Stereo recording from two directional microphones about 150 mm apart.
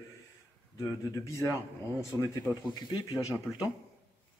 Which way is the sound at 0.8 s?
20° left (ahead or behind).